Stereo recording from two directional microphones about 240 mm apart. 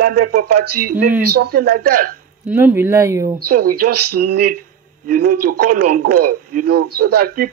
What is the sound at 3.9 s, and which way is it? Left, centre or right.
Speech, right.